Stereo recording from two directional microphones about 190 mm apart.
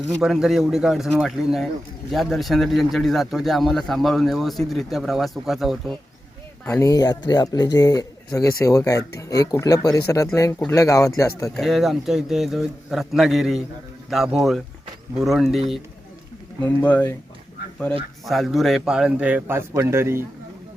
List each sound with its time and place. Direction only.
0.2 s speech: centre (ahead or behind)
6.7 s speech: 15° left (ahead or behind)
11.5 s speech: centre (ahead or behind)
16.6 s speech: 10° left (ahead or behind)
18.3 s a man's voice: centre (ahead or behind)